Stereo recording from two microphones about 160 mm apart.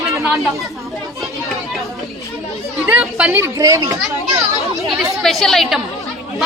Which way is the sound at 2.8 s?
10° right (ahead or behind).